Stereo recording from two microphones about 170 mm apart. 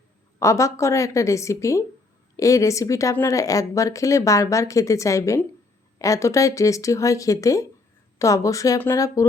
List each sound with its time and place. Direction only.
0.3 s a woman's voice: 20° left (ahead or behind)